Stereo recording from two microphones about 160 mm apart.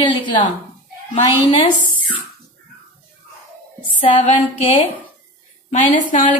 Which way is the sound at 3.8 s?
30° left (ahead or behind).